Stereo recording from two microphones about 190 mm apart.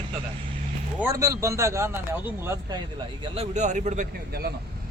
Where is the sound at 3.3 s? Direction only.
35° right (ahead or behind).